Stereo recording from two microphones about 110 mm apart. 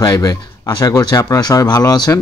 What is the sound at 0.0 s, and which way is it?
Speech, 35° left (ahead or behind).